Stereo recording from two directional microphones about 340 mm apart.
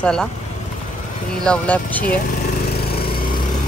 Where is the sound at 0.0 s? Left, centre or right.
Centre.